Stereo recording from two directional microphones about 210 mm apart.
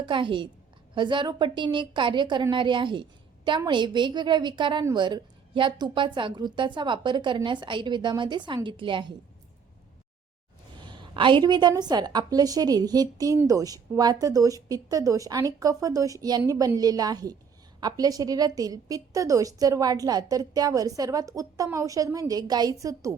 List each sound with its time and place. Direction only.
0.0 s a woman's voice: 25° right (ahead or behind)
10.8 s a woman's voice: 20° right (ahead or behind)